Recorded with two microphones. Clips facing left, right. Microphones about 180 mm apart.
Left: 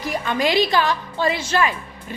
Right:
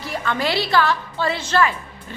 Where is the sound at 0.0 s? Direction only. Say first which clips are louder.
Left 2 dB; 15° left (ahead or behind).